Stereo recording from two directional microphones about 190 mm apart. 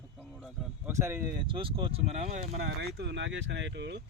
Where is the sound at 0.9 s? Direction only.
15° right (ahead or behind).